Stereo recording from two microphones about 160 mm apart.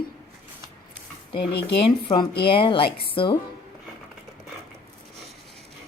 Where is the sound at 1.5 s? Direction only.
90° left.